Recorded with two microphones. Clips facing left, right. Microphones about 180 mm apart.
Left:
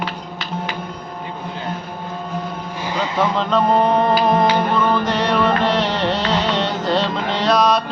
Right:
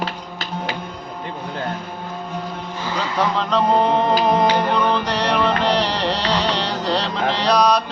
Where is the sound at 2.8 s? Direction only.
15° left (ahead or behind).